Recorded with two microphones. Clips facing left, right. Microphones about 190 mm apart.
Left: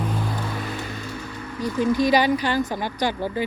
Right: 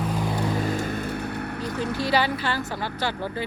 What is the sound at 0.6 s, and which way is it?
Vehicle, 45° right (ahead or behind).